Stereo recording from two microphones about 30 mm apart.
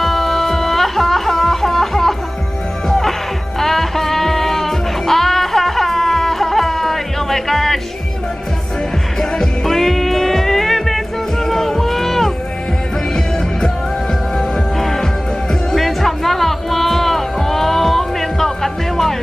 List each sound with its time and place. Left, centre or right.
0.0 s music: centre
9.2 s music: left
9.7 s music: centre
14.8 s music: centre